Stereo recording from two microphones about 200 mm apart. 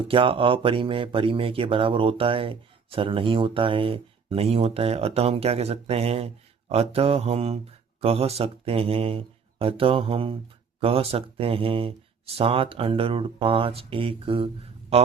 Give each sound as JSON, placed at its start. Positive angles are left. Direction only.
{"t": 0.1, "sound": "speech", "side_deg": -25}